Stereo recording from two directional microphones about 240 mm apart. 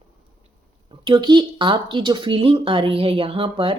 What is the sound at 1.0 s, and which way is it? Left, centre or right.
Speech, centre.